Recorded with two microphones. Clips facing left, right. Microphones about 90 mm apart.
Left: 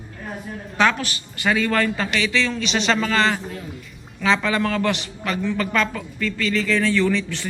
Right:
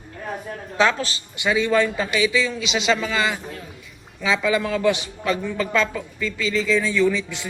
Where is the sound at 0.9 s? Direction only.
30° right (ahead or behind).